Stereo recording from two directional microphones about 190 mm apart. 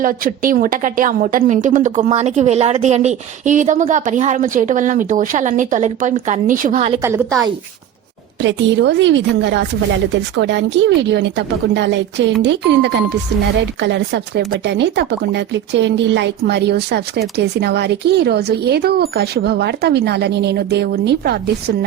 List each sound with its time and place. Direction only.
0.0 s a woman's voice: 45° right (ahead or behind)
7.0 s a woman's voice: 15° right (ahead or behind)
8.4 s speech: 70° right (ahead or behind)